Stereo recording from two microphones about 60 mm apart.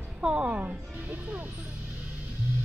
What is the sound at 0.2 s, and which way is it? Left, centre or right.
Speech, right.